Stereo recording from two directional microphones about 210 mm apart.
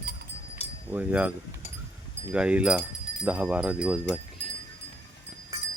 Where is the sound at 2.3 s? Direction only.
5° right (ahead or behind).